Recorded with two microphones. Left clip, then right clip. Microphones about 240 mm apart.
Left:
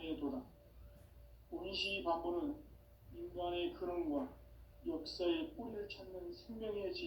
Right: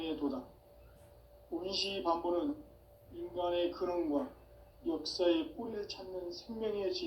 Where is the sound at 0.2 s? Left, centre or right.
Right.